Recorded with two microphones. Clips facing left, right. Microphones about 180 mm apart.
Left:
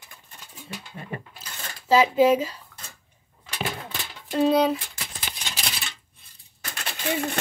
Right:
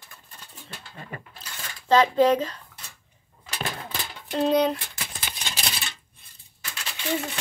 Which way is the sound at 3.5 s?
40° right (ahead or behind).